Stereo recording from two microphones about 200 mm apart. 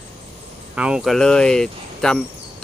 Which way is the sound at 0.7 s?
5° right (ahead or behind).